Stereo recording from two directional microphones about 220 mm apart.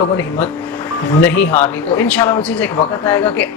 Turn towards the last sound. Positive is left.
turn(degrees=10)  # may be behind; listen again after turning